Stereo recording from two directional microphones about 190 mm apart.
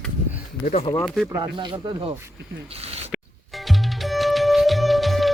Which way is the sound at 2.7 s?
30° right (ahead or behind).